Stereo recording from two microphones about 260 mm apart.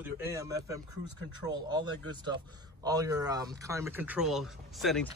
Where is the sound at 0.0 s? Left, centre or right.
Centre.